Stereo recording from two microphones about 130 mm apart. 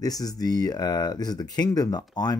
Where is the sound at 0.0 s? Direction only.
30° left (ahead or behind).